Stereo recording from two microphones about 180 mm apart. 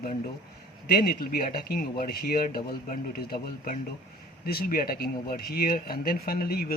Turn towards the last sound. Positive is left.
turn(degrees=55)  # may be behind; listen again after turning